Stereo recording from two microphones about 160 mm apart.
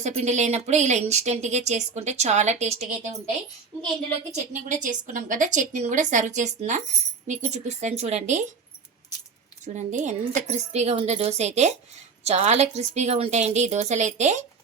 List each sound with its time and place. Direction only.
0.0 s a woman's voice: 45° right (ahead or behind)
4.7 s a woman's voice: 55° right (ahead or behind)
9.6 s a woman's voice: 50° right (ahead or behind)